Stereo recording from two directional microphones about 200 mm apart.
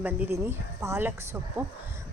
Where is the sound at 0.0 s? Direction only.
10° right (ahead or behind).